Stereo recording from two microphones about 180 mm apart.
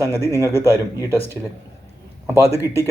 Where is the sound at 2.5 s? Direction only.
15° right (ahead or behind).